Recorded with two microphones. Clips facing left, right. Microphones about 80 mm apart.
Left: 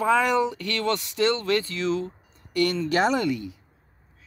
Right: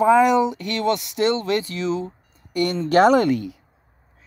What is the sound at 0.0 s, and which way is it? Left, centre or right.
Speech, centre.